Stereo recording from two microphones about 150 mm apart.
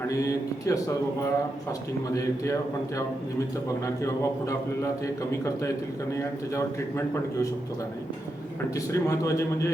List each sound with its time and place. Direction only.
0.1 s speech: 20° left (ahead or behind)
3.8 s speech: 20° left (ahead or behind)
8.9 s speech: 20° left (ahead or behind)